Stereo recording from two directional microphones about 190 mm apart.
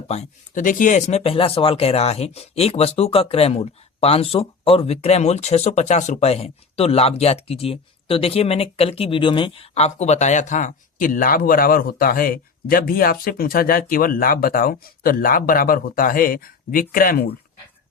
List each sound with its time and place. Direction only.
0.1 s speech: 40° left (ahead or behind)